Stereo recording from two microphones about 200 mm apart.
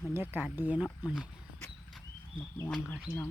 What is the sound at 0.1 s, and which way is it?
Speech, 10° right (ahead or behind).